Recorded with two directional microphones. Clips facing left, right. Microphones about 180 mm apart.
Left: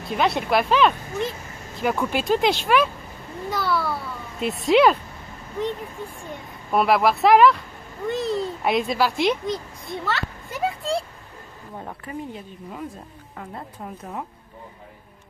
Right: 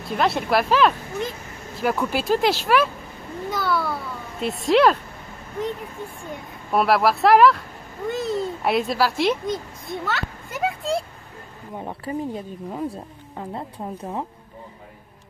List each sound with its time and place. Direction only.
0.1 s a child's voice: centre (ahead or behind)
6.7 s speech: centre (ahead or behind)
12.0 s speech: 35° right (ahead or behind)